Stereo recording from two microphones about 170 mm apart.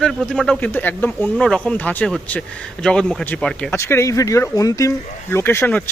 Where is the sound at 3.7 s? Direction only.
15° left (ahead or behind).